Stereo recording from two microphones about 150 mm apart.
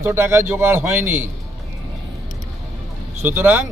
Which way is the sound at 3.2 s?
15° right (ahead or behind).